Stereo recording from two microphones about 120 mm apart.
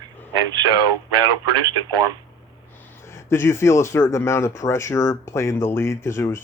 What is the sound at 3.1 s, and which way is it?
Speech, 20° left (ahead or behind).